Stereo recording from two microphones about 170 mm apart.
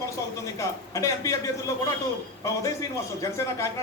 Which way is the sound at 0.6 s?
20° left (ahead or behind).